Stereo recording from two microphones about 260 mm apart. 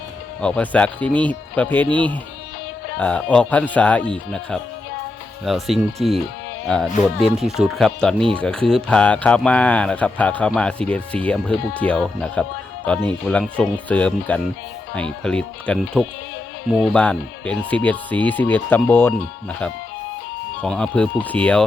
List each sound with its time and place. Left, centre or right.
0.4 s speech: centre
3.0 s speech: centre